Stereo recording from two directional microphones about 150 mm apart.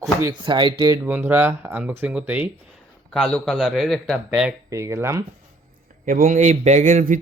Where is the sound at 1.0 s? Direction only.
15° right (ahead or behind).